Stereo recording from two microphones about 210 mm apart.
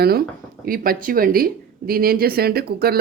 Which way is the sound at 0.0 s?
45° right (ahead or behind).